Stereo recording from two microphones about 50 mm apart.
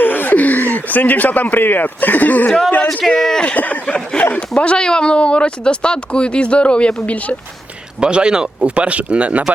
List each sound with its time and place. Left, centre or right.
0.0 s a sound: left
0.3 s speech: left
3.1 s speech: centre
3.4 s speech: left
8.0 s speech: centre